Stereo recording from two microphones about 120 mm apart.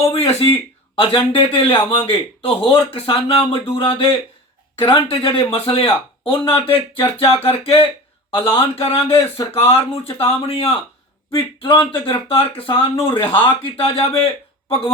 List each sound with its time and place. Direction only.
0.0 s speech: 60° left (ahead or behind)